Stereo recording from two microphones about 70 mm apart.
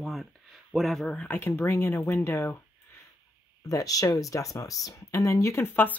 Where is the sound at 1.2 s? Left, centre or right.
Left.